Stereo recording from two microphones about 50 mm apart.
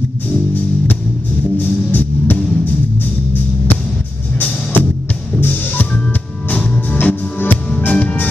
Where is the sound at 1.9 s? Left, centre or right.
Left.